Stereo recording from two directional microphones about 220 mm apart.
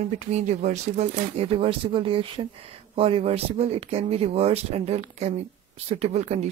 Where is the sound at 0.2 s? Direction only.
30° right (ahead or behind).